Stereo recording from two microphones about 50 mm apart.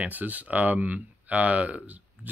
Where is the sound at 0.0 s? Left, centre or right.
Right.